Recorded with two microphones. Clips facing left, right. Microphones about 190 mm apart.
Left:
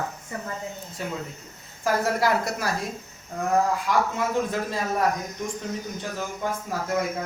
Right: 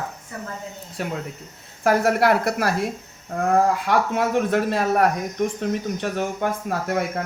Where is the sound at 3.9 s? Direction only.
65° right (ahead or behind).